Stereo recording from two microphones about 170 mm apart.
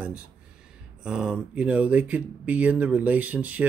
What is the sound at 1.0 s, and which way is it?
Speech, 5° right (ahead or behind).